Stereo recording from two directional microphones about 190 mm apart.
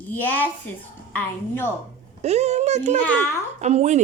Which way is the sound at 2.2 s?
35° right (ahead or behind).